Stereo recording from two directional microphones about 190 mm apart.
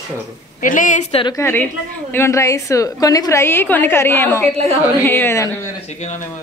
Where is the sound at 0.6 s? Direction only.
45° left (ahead or behind).